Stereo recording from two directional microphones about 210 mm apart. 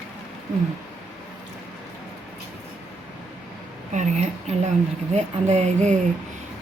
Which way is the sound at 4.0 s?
35° right (ahead or behind).